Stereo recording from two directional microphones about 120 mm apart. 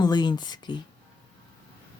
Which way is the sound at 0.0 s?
35° left (ahead or behind).